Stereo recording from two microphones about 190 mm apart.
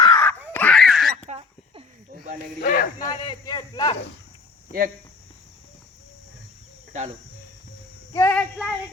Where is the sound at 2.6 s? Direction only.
45° left (ahead or behind).